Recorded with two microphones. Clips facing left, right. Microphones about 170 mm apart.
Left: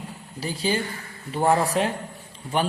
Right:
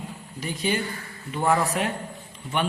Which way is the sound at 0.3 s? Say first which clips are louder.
Left 1 dB; 30° left (ahead or behind).